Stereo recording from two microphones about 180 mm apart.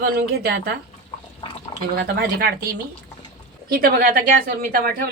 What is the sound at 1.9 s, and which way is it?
A woman's voice, 60° right (ahead or behind).